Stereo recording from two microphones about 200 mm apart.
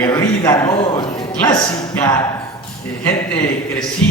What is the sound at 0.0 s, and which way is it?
A man's voice, 20° left (ahead or behind).